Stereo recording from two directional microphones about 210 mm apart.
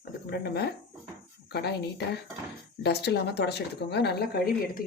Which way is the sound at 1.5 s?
50° left (ahead or behind).